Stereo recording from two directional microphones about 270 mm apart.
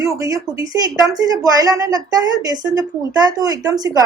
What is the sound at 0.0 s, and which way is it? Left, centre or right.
Speech, centre.